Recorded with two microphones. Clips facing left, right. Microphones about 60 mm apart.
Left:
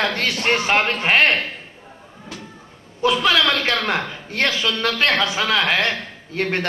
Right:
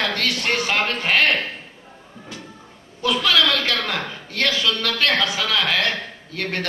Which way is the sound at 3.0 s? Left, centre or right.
Left.